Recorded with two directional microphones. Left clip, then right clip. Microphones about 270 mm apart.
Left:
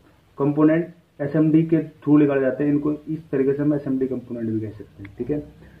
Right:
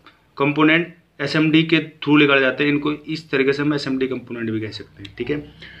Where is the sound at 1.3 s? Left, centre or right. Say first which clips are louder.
Right 2 dB; centre.